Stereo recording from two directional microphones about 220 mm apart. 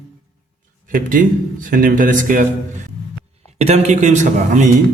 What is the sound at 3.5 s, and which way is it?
A man's voice, 30° right (ahead or behind).